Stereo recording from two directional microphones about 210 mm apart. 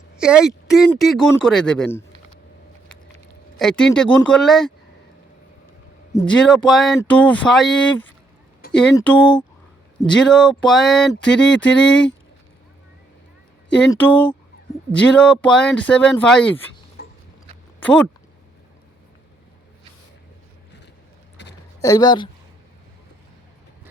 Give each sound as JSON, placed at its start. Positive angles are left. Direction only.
{"t": 0.2, "sound": "speech", "side_deg": -5}
{"t": 3.6, "sound": "speech", "side_deg": 0}
{"t": 6.2, "sound": "speech", "side_deg": 5}
{"t": 9.0, "sound": "speech", "side_deg": 5}
{"t": 13.9, "sound": "speech", "side_deg": 5}
{"t": 17.7, "sound": "speech", "side_deg": 5}
{"t": 21.8, "sound": "speech", "side_deg": 15}